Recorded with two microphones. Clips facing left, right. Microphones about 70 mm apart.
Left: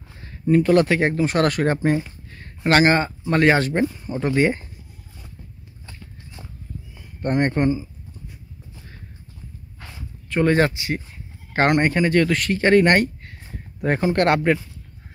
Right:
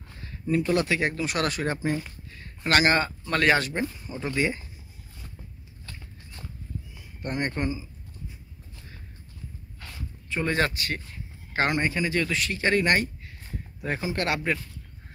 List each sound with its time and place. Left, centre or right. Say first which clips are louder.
0.5 s speech: left 8 dB; left
1.5 s speech: left 8 dB; left
2.3 s speech: left 6 dB; left
7.2 s speech: left 9 dB; left
10.3 s speech: left 9 dB; left
10.6 s speech: left 6 dB; centre
11.6 s speech: left 8 dB; left